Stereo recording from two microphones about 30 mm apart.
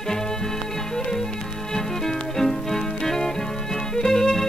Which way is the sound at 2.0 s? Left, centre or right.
Centre.